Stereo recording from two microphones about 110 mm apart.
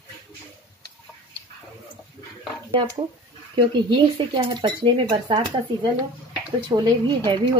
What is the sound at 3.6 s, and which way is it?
Speech, 45° right (ahead or behind).